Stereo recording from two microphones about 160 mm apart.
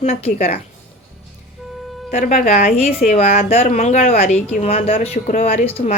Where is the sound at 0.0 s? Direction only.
40° left (ahead or behind).